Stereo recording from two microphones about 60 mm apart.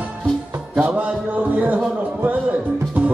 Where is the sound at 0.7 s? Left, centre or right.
Centre.